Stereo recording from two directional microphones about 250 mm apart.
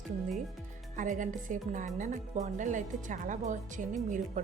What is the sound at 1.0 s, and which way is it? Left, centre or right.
A woman's voice, right.